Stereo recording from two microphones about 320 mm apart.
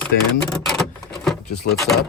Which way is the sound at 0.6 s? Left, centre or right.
Centre.